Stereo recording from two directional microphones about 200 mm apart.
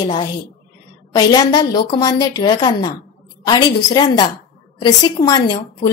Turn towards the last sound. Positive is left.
turn(degrees=20)  # may be behind; listen again after turning